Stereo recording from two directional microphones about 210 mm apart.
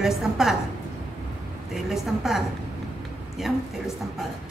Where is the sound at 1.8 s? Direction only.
Centre (ahead or behind).